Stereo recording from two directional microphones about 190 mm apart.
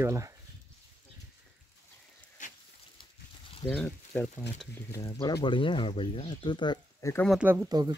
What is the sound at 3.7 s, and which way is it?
Speech, 5° left (ahead or behind).